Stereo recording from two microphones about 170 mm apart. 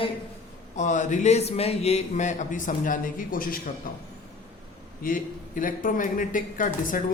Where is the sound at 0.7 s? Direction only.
45° left (ahead or behind).